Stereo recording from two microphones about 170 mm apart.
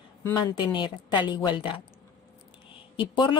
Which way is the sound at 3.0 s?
30° left (ahead or behind).